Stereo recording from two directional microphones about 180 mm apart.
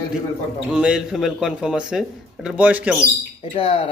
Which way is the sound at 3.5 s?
30° left (ahead or behind).